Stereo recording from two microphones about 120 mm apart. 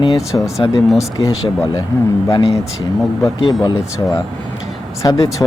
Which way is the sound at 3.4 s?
35° left (ahead or behind).